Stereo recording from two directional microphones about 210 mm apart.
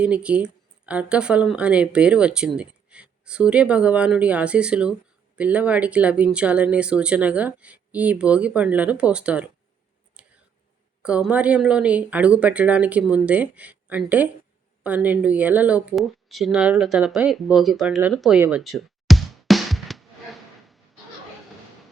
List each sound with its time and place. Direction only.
0.0 s speech: 5° right (ahead or behind)
10.2 s whispering: 5° right (ahead or behind)
11.0 s speech: 5° right (ahead or behind)
18.4 s music: 5° right (ahead or behind)